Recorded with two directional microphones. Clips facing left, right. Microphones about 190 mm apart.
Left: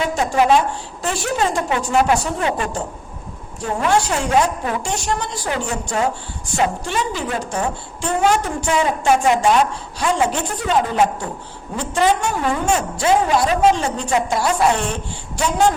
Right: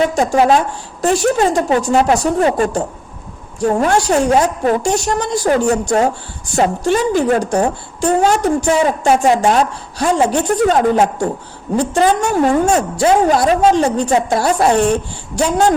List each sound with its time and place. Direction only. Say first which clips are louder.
0.0 s a woman's voice: right 5 dB; 40° right (ahead or behind)